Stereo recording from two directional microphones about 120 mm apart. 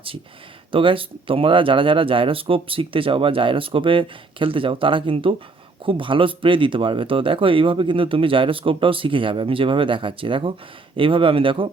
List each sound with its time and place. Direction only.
0.7 s speech: 45° right (ahead or behind)